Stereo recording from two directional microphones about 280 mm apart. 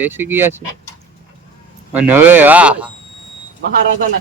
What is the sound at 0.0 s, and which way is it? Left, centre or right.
Speech, centre.